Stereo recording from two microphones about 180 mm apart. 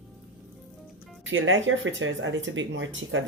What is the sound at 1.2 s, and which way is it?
Speech, 90° right.